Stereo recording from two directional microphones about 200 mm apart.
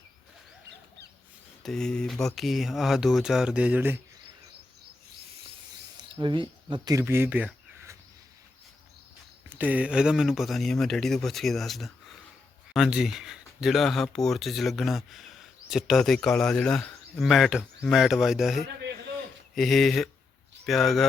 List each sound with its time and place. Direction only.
1.6 s speech: 5° left (ahead or behind)
6.0 s speech: 25° right (ahead or behind)
9.5 s speech: 10° right (ahead or behind)